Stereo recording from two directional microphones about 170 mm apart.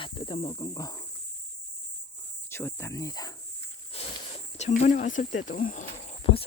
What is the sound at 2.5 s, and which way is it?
Speech, 15° left (ahead or behind).